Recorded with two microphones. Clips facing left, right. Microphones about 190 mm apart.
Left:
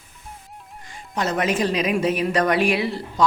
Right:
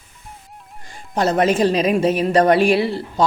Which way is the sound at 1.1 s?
35° right (ahead or behind).